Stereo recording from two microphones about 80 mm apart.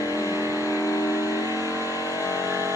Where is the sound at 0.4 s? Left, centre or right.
Right.